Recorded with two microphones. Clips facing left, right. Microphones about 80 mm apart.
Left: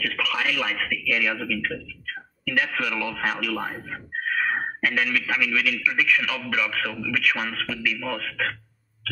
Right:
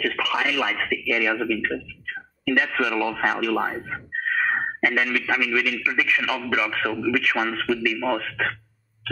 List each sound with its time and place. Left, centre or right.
0.0 s speech: centre
2.4 s speech: centre
3.6 s a man's voice: centre